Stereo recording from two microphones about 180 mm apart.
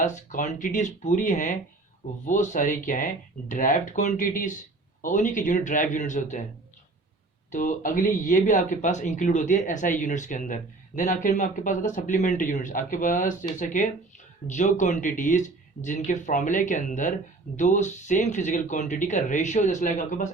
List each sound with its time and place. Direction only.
0.0 s speech: 45° left (ahead or behind)
7.5 s speech: 45° left (ahead or behind)